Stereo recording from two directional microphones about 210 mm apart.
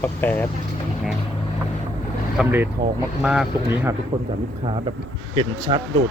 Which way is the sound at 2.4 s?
10° right (ahead or behind).